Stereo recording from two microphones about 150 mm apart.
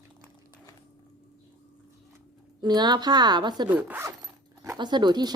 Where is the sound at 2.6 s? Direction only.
30° right (ahead or behind).